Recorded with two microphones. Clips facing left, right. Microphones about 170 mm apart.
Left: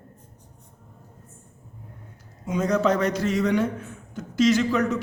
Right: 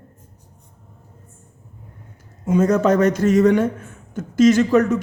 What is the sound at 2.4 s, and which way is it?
A man's voice, 50° right (ahead or behind).